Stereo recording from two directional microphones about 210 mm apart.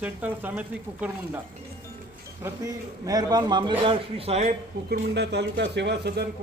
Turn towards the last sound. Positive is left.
turn(degrees=-50)  # may be behind; listen again after turning